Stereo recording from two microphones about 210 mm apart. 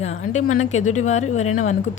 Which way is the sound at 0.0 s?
35° left (ahead or behind).